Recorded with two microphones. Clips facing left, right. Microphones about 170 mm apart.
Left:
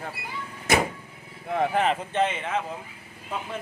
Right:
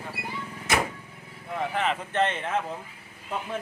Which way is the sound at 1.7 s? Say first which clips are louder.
Left 2 dB; 40° left (ahead or behind).